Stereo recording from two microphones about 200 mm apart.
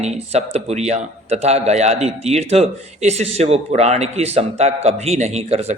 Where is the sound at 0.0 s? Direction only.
35° right (ahead or behind).